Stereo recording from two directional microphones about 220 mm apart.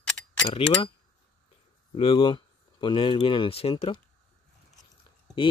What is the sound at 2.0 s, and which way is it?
Speech, 25° left (ahead or behind).